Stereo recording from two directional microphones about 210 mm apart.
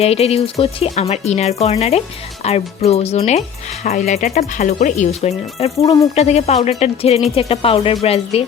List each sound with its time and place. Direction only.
0.0 s speech: 30° left (ahead or behind)
5.8 s speech: 20° left (ahead or behind)
6.1 s speech: 30° left (ahead or behind)